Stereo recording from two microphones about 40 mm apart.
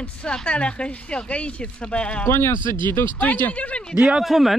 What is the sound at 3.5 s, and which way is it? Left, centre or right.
Speech, left.